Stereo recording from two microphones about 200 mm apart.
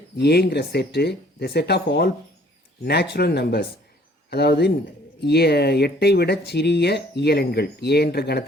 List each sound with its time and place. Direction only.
0.2 s speech: 55° left (ahead or behind)